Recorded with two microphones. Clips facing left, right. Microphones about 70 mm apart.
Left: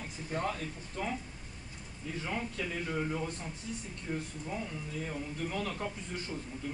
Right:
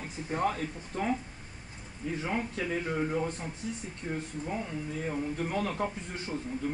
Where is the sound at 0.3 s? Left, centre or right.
Right.